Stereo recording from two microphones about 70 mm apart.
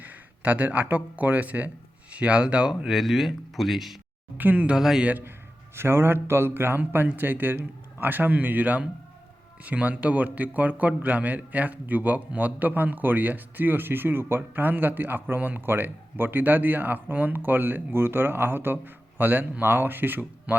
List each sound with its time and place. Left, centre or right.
0.0 s speech: right; by 3.9 s centre
4.4 s a man's voice: right
4.7 s speech: centre
5.0 s a man's voice: right
5.7 s a man's voice: right